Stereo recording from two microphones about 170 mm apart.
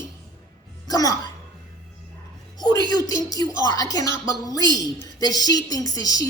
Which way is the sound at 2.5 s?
25° left (ahead or behind).